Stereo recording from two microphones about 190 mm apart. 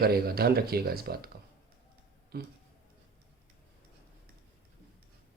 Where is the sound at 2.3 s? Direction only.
55° right (ahead or behind).